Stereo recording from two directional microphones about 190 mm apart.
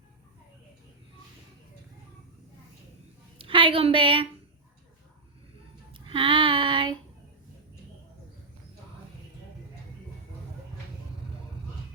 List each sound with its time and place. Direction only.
3.3 s a woman's voice: 30° right (ahead or behind)
5.9 s child singing: 25° right (ahead or behind)